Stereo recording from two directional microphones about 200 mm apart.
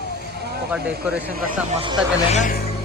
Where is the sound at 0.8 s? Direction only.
50° right (ahead or behind).